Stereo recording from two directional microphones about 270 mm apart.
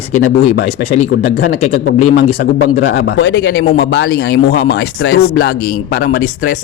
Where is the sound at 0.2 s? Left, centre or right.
Left.